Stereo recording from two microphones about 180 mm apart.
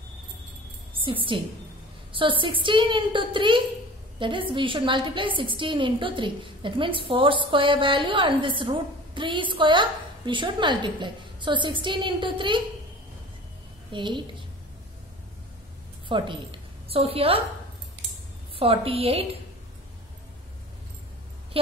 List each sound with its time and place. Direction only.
1.3 s a woman's voice: 30° right (ahead or behind)
13.9 s a woman's voice: 25° right (ahead or behind)
16.1 s a woman's voice: 25° right (ahead or behind)
18.6 s a woman's voice: 30° right (ahead or behind)